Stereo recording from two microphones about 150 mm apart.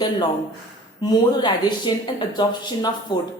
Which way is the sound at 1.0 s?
30° left (ahead or behind).